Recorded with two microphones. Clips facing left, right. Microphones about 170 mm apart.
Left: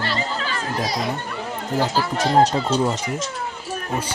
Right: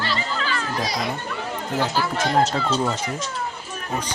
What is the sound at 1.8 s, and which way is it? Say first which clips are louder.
Speech: left 2 dB; 35° left (ahead or behind).